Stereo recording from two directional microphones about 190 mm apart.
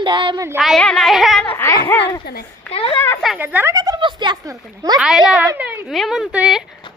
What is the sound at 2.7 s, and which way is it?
Speech, 30° left (ahead or behind).